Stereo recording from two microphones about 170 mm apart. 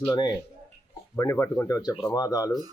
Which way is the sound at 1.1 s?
20° left (ahead or behind).